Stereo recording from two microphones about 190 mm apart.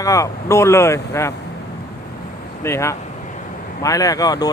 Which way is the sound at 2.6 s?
15° left (ahead or behind).